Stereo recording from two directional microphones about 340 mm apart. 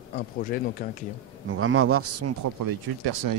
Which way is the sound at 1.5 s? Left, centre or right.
Right.